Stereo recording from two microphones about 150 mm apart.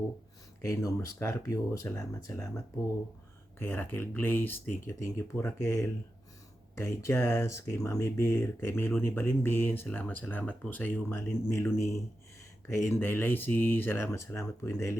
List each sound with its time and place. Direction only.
0.6 s speech: 20° left (ahead or behind)